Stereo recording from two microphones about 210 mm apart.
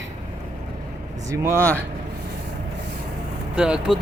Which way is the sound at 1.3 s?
10° right (ahead or behind).